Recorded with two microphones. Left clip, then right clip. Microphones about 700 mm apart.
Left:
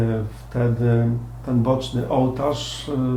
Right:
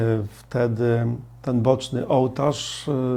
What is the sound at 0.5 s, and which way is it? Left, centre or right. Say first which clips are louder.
Speech: right 1 dB; right.